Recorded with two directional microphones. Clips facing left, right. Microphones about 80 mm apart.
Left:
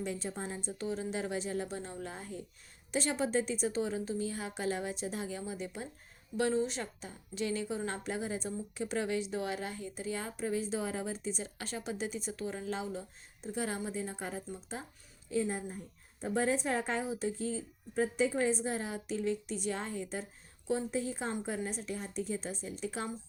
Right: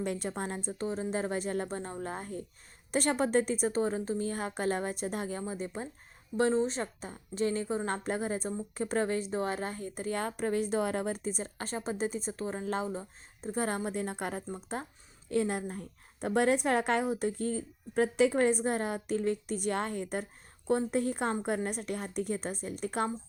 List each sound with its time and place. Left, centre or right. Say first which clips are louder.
0.0 s a woman's voice: right 4 dB; right
0.7 s a woman's voice: right 2 dB; right
14.4 s a woman's voice: right 5 dB; right
15.3 s a woman's voice: right 3 dB; right